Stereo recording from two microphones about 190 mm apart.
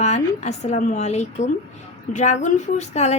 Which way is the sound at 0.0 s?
35° left (ahead or behind).